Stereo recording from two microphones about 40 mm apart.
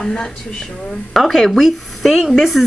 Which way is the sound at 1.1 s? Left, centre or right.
Centre.